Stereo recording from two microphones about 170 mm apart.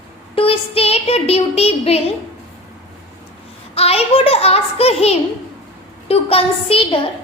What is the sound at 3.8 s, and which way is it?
Speech, 35° left (ahead or behind).